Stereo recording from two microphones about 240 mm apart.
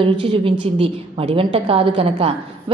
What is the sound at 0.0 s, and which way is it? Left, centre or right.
A woman's voice, right.